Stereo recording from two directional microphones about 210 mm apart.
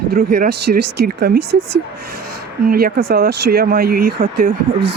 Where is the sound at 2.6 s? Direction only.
45° right (ahead or behind).